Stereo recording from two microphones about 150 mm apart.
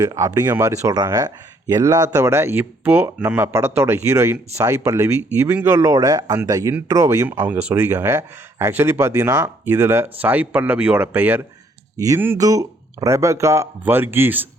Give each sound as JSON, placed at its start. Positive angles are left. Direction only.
{"t": 0.0, "sound": "speech", "side_deg": -25}